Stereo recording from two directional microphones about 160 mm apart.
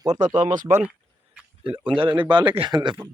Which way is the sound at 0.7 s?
10° right (ahead or behind).